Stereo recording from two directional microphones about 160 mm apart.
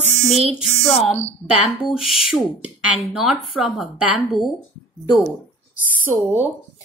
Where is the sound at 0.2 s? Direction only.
40° right (ahead or behind).